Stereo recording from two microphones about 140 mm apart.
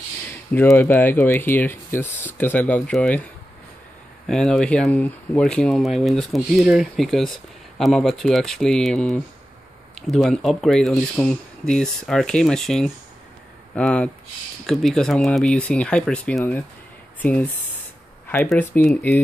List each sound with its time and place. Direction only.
0.7 s speech: 20° left (ahead or behind)
4.3 s speech: 5° left (ahead or behind)
18.5 s speech: 15° left (ahead or behind)